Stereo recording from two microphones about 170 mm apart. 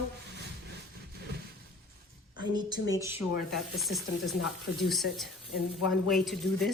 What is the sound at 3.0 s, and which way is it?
Speech, 15° right (ahead or behind).